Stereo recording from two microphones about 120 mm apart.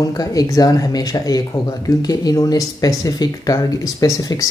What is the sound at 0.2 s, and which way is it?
Speech, 30° left (ahead or behind).